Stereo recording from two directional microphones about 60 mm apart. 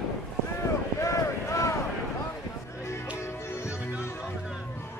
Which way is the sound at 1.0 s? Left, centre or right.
Left.